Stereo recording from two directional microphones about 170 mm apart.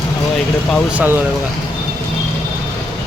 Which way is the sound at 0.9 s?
10° right (ahead or behind).